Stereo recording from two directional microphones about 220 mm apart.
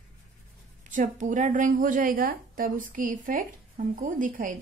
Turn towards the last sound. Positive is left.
turn(degrees=-35)  # may be behind; listen again after turning